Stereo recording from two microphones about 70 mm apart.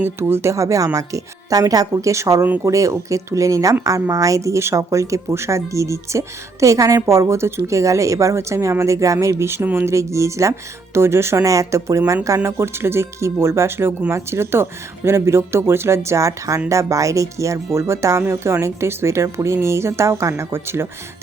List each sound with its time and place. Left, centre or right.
0.0 s speech: right